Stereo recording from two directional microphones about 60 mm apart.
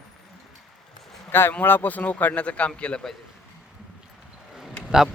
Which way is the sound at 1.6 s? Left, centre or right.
Left.